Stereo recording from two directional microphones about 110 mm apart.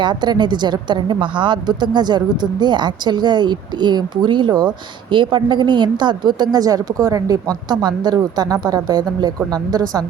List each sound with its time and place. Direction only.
0.0 s a woman's voice: 45° right (ahead or behind)